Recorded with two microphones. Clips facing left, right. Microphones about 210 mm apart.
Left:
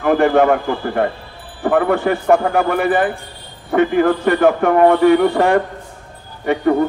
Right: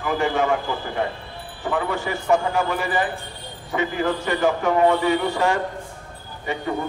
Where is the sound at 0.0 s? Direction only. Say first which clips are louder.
Left 9 dB; 60° left (ahead or behind).